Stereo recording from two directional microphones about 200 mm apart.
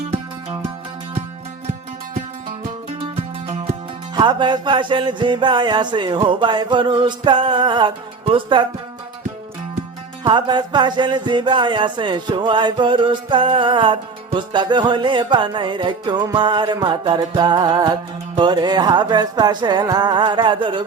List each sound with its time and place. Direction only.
3.4 s music: 30° right (ahead or behind)
10.2 s music: 20° right (ahead or behind)